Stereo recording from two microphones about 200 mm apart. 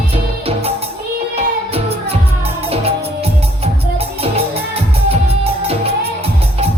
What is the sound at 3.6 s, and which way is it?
Music, 30° right (ahead or behind).